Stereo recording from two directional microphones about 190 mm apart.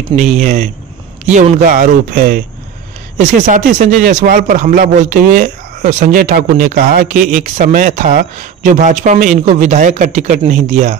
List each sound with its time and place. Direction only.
0.1 s speech: 40° right (ahead or behind)